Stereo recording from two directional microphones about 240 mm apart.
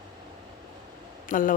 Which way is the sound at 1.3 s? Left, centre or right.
Left.